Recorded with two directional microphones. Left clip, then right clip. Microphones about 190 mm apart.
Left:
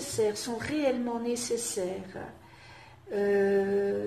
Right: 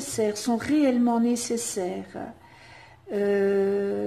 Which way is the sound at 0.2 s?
45° right (ahead or behind).